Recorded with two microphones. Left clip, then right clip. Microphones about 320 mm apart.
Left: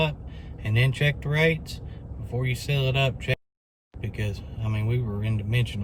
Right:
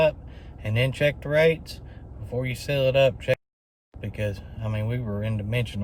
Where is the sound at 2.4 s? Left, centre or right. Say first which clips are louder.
Right 5 dB; centre.